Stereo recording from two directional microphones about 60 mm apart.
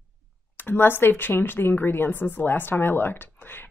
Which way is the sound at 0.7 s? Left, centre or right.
Left.